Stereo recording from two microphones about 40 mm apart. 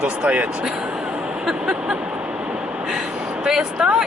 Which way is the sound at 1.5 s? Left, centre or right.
Centre.